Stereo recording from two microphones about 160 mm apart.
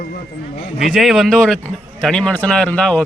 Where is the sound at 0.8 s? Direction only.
Centre (ahead or behind).